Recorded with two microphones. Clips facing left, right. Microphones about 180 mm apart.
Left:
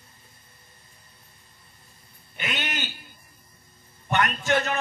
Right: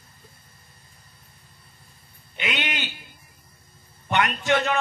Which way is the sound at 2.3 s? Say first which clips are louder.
Right 2 dB; 45° left (ahead or behind).